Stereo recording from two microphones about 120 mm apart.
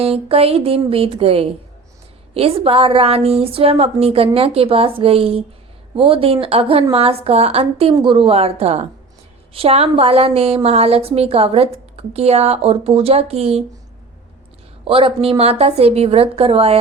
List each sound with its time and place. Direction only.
0.0 s a woman's voice: 55° right (ahead or behind)
14.8 s a woman's voice: 50° right (ahead or behind)